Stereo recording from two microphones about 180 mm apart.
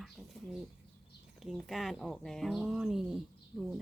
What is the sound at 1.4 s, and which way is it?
A woman's voice, centre (ahead or behind).